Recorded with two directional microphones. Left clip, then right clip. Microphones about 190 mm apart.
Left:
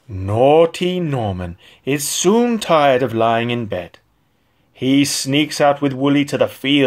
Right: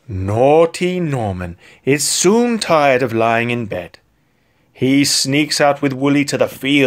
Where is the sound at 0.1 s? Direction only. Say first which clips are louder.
Right 1 dB; 30° right (ahead or behind).